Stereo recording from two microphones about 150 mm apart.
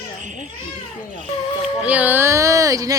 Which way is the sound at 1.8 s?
10° right (ahead or behind).